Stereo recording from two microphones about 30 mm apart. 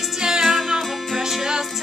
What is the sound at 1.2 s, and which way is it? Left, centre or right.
Music, centre.